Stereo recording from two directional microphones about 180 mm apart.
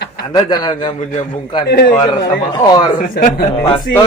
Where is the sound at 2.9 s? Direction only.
50° left (ahead or behind).